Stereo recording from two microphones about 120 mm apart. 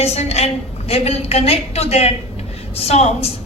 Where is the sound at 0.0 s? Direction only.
60° left (ahead or behind).